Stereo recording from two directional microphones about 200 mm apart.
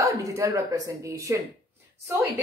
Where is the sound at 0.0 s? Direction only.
15° right (ahead or behind).